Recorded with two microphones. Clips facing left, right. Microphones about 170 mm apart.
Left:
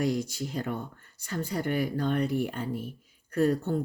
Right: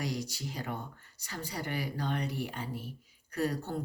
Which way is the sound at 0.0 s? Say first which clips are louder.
Left 8 dB; 50° left (ahead or behind).